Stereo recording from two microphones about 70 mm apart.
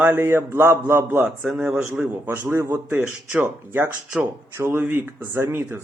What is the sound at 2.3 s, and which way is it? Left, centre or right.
Speech, right.